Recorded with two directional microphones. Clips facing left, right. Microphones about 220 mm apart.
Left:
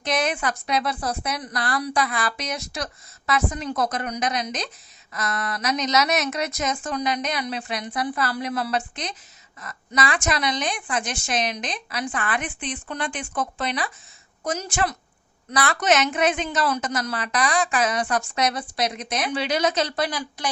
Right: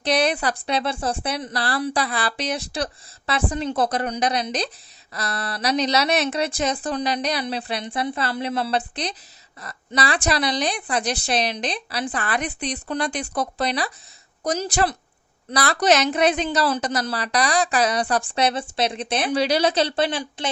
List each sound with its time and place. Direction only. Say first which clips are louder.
0.0 s a woman's voice: right 3 dB; 35° right (ahead or behind)